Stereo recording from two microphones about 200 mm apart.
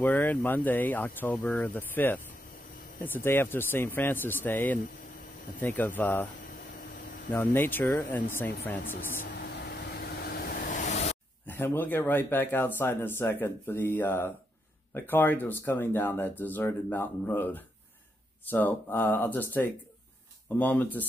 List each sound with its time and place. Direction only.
0.0 s speech: 10° left (ahead or behind)
7.3 s speech: 10° left (ahead or behind)
9.2 s vehicle: 50° left (ahead or behind); by 11.1 s 35° left (ahead or behind)
11.4 s speech: 10° left (ahead or behind)